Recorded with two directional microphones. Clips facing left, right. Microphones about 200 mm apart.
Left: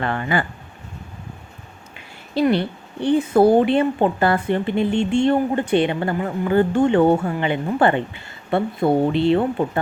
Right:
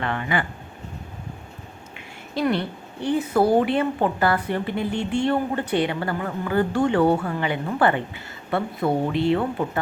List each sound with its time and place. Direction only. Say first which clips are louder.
0.0 s speech: left 3 dB; 40° left (ahead or behind)
2.3 s a woman's voice: left 5 dB; 30° left (ahead or behind)